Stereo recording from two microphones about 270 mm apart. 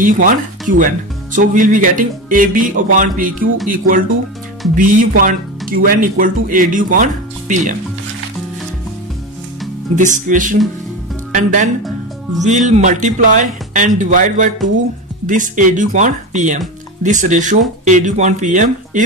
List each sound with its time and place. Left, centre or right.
0.0 s speech: right
9.9 s speech: right